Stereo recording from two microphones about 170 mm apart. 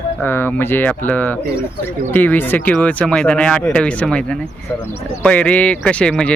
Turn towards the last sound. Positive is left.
turn(degrees=5)  # may be behind; listen again after turning